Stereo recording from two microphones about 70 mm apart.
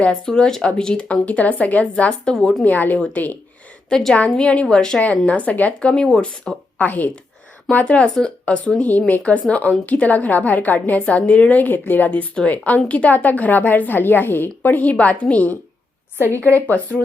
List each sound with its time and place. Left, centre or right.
0.0 s speech: centre
2.6 s a woman's voice: left
3.8 s speech: centre
5.2 s speech: centre
6.7 s a woman's voice: left
16.1 s a woman's voice: right
16.4 s a woman's voice: left